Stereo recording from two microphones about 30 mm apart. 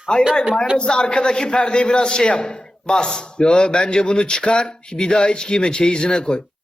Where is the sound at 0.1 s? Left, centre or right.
Left.